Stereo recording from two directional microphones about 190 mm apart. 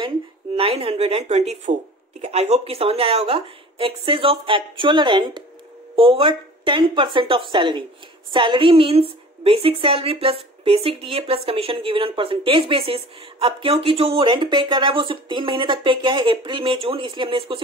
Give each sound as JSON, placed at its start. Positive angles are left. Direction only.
{"t": 0.6, "sound": "a woman's voice", "side_deg": -30}